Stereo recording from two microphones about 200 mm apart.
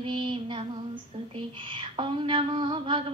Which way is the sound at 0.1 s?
25° right (ahead or behind).